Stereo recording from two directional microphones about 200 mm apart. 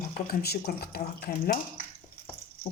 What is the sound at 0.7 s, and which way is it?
Speech, 50° left (ahead or behind).